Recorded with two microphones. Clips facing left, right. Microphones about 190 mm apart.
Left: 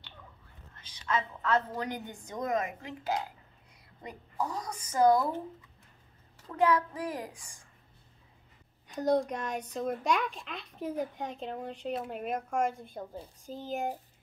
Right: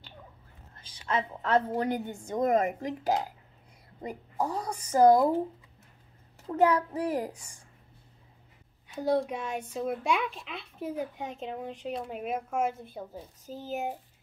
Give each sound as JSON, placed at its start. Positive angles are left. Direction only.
{"t": 0.7, "sound": "a woman's voice", "side_deg": -30}
{"t": 4.4, "sound": "a child's voice", "side_deg": -30}
{"t": 6.4, "sound": "a child's voice", "side_deg": -35}
{"t": 8.8, "sound": "a child's voice", "side_deg": -5}